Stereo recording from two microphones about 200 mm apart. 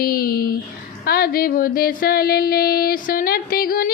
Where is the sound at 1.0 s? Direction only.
50° left (ahead or behind).